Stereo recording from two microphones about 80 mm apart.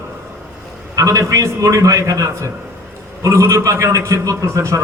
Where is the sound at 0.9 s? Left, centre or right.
Right.